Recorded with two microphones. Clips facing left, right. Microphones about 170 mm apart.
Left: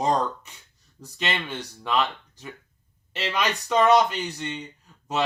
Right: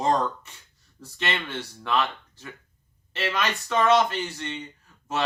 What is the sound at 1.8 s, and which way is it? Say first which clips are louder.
Speech: left 1 dB; 15° left (ahead or behind).